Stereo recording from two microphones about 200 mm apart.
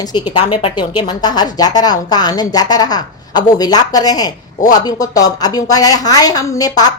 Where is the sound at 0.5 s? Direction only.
25° left (ahead or behind).